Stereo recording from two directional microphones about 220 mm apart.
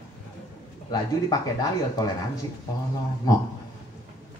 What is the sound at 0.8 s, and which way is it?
Speech, 15° left (ahead or behind).